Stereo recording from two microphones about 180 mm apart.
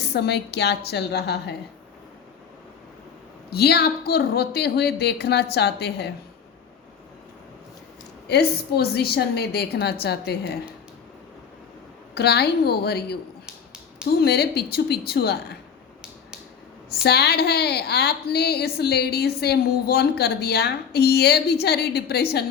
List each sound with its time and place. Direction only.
0.1 s a woman's voice: 65° left (ahead or behind)
3.5 s a woman's voice: 65° left (ahead or behind)
8.3 s a woman's voice: 65° left (ahead or behind)
12.1 s a woman's voice: 65° left (ahead or behind)
13.4 s finger snapping: 5° right (ahead or behind)
14.2 s a woman's voice: 60° left (ahead or behind)
17.0 s a woman's voice: 60° left (ahead or behind)